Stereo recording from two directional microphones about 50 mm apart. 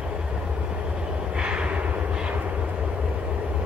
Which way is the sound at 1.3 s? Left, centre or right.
Right.